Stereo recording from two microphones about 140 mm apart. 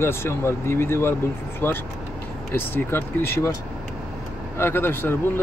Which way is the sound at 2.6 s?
15° left (ahead or behind).